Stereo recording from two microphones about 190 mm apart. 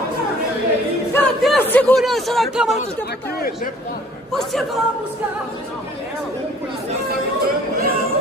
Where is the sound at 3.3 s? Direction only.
50° left (ahead or behind).